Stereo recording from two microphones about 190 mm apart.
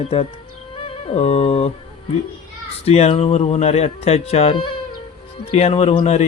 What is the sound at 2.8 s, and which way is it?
Speech, 35° left (ahead or behind).